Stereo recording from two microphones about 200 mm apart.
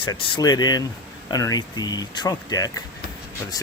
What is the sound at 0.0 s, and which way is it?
Speech, 20° left (ahead or behind).